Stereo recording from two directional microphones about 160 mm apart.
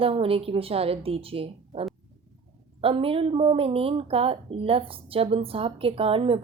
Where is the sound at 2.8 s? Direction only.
35° right (ahead or behind).